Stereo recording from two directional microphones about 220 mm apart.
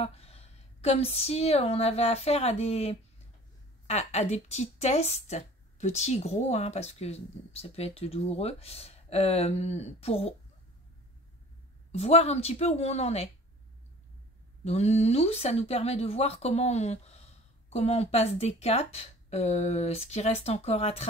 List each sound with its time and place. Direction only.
0.0 s a woman's voice: 25° left (ahead or behind)
11.9 s a woman's voice: 30° left (ahead or behind)
14.6 s a woman's voice: 30° left (ahead or behind)